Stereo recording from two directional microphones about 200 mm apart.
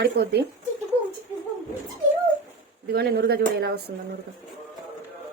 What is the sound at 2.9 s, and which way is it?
Speech, 55° right (ahead or behind).